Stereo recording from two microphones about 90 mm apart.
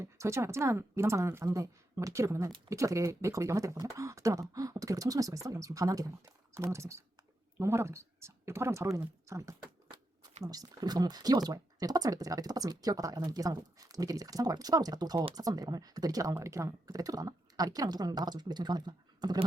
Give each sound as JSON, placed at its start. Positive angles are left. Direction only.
{"t": 0.0, "sound": "speech", "side_deg": -30}